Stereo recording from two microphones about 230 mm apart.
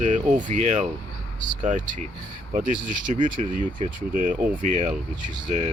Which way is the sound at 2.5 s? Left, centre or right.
Right.